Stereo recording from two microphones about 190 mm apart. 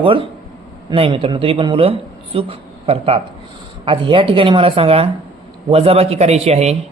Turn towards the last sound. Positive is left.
turn(degrees=-35)  # may be behind; listen again after turning